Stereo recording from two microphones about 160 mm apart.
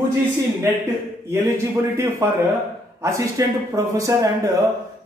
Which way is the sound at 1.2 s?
15° right (ahead or behind).